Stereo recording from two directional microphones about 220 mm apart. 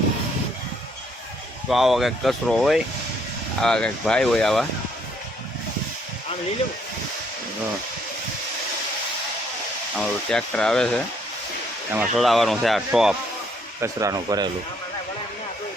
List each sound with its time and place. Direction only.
1.7 s speech: centre (ahead or behind)
10.2 s speech: 5° left (ahead or behind)
13.8 s speech: 15° right (ahead or behind)